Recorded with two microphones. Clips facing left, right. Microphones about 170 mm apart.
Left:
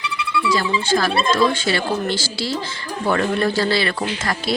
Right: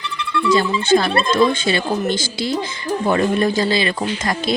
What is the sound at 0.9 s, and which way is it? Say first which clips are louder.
Speech: right 5 dB; 25° right (ahead or behind).